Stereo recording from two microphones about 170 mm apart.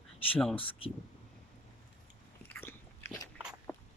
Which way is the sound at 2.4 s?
15° left (ahead or behind).